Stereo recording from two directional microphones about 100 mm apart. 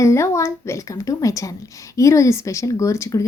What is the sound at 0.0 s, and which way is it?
A woman's voice, 30° left (ahead or behind).